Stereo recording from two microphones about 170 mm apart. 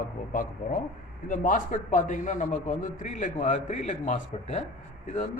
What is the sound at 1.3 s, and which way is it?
A man's voice, 50° left (ahead or behind).